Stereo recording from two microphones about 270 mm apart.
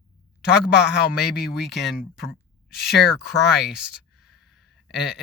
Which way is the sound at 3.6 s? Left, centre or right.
Centre.